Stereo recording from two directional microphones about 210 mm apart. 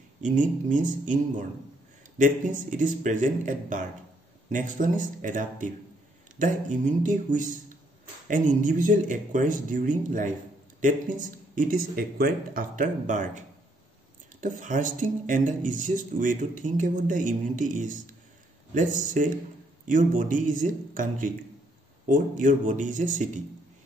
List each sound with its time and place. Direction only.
0.2 s speech: 35° right (ahead or behind)
14.4 s speech: 40° right (ahead or behind)